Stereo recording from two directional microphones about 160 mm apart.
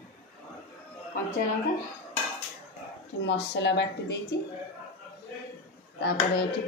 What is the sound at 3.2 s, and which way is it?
Speech, 90° left.